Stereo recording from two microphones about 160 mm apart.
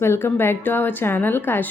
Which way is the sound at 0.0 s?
15° left (ahead or behind).